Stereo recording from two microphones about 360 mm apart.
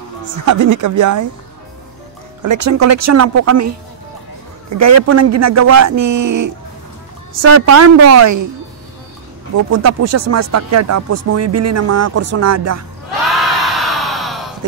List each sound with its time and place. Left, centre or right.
0.5 s speech: right
2.4 s speech: right
4.6 s speech: right
9.7 s speech: right
13.3 s a sound: centre
14.6 s a sound: right